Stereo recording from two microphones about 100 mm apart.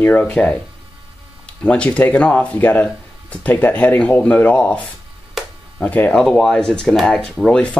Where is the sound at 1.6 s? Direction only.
15° left (ahead or behind).